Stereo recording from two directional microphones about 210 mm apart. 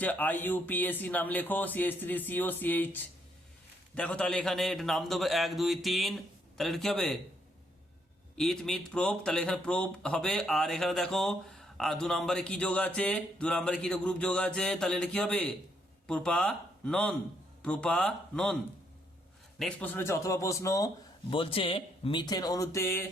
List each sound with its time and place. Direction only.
0.0 s speech: 10° left (ahead or behind)
8.4 s speech: centre (ahead or behind)
19.5 s speech: 5° left (ahead or behind)